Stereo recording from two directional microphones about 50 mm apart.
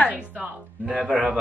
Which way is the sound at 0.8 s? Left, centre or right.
Centre.